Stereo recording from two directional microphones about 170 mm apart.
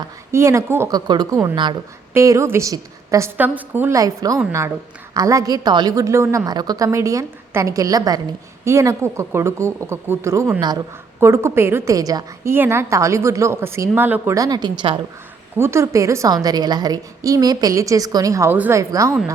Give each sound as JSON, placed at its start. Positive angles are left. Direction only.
{"t": 0.3, "sound": "a woman's voice", "side_deg": -15}
{"t": 15.5, "sound": "a woman's voice", "side_deg": -15}